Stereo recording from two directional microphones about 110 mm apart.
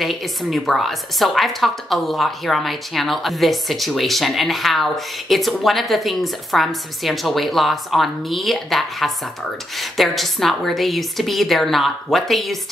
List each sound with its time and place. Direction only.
0.0 s a woman's voice: centre (ahead or behind)